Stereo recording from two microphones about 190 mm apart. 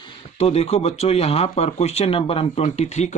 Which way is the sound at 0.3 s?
35° left (ahead or behind).